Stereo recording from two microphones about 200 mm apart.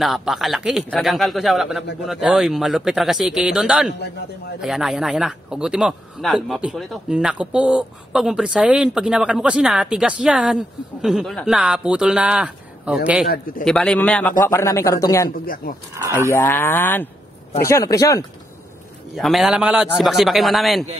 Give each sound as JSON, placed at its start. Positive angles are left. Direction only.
{"t": 0.0, "sound": "a man's voice", "side_deg": 0}
{"t": 13.3, "sound": "a man's voice", "side_deg": 45}
{"t": 13.7, "sound": "a man's voice", "side_deg": 5}
{"t": 15.4, "sound": "a man's voice", "side_deg": 45}
{"t": 16.3, "sound": "a man's voice", "side_deg": 10}
{"t": 19.1, "sound": "a man's voice", "side_deg": 0}